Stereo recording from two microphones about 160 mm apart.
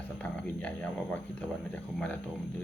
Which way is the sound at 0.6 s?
10° left (ahead or behind).